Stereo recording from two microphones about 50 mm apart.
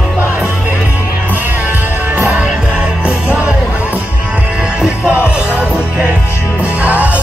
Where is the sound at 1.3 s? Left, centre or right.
Right.